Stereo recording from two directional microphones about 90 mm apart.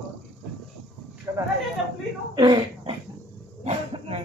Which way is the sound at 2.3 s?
50° right (ahead or behind).